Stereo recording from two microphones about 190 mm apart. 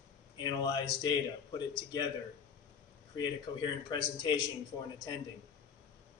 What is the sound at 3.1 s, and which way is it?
A man's voice, 25° left (ahead or behind).